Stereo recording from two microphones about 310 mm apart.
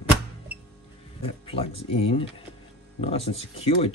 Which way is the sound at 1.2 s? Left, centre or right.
Centre.